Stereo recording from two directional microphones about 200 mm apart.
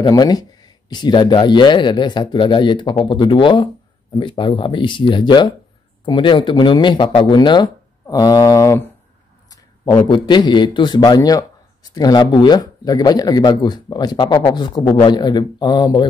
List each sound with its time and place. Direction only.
0.0 s a man's voice: 20° left (ahead or behind)
9.5 s a man's voice: 25° left (ahead or behind)